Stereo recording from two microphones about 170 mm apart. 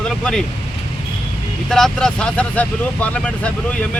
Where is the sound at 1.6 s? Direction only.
Centre (ahead or behind).